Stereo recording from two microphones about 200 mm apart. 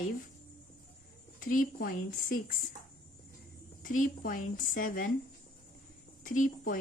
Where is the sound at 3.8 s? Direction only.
40° left (ahead or behind).